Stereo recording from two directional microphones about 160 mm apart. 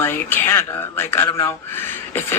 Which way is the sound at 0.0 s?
15° left (ahead or behind).